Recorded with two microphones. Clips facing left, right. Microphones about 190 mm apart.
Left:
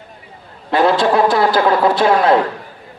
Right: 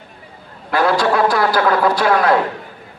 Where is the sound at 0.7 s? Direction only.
25° left (ahead or behind).